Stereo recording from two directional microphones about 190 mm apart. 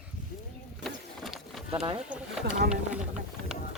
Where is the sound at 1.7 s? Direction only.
30° right (ahead or behind).